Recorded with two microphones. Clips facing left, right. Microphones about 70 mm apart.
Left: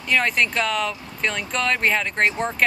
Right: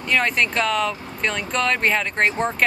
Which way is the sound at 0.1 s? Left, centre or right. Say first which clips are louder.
Even; centre.